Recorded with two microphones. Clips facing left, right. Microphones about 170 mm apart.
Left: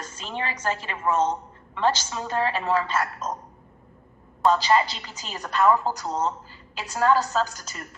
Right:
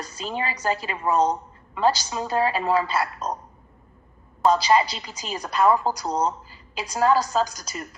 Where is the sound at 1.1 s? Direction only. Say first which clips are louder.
Right 2 dB; 35° right (ahead or behind).